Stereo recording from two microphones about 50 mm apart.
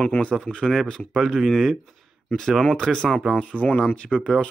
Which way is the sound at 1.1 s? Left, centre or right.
Centre.